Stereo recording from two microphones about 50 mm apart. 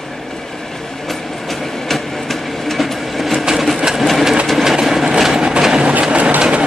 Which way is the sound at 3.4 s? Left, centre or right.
Centre.